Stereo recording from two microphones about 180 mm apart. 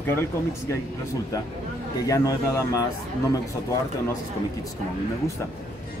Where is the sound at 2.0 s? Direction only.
20° left (ahead or behind).